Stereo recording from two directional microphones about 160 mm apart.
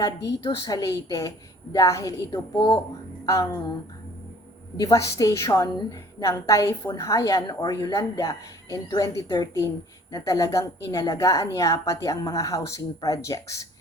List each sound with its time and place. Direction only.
0.5 s a woman's voice: 25° left (ahead or behind)
4.8 s a woman's voice: 20° left (ahead or behind)